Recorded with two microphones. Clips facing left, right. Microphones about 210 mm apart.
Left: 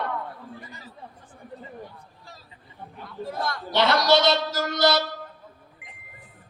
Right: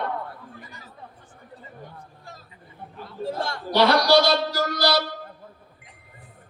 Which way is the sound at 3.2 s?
25° right (ahead or behind).